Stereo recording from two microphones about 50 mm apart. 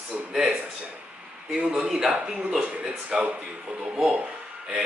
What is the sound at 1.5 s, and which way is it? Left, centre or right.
Speech, centre.